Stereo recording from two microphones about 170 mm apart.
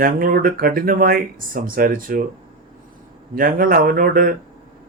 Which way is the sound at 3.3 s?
55° right (ahead or behind).